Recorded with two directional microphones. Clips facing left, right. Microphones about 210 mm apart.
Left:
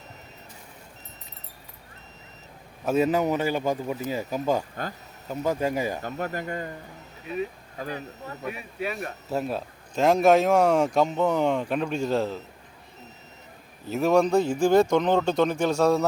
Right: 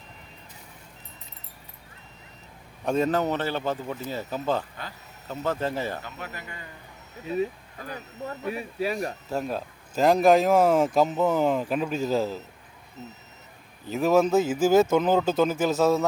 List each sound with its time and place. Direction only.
2.8 s a man's voice: 5° left (ahead or behind)
6.0 s speech: 50° left (ahead or behind)
8.4 s speech: 35° right (ahead or behind)
9.3 s a man's voice: 5° left (ahead or behind)
13.8 s a man's voice: centre (ahead or behind)